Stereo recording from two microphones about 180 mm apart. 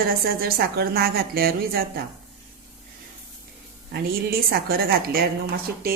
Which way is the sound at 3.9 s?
60° right (ahead or behind).